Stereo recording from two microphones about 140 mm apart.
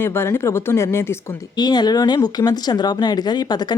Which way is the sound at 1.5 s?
30° left (ahead or behind).